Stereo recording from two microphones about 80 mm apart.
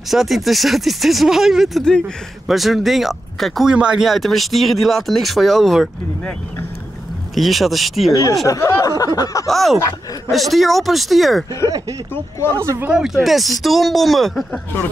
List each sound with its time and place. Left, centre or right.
0.1 s speech: centre
3.7 s speech: centre
7.3 s speech: centre
8.1 s a sound: left
9.5 s speech: centre
12.5 s speech: right
12.9 s speech: centre